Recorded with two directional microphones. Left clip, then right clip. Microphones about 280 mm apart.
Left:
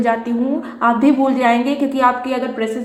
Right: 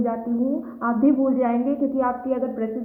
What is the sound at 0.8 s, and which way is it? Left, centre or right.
A woman's voice, centre.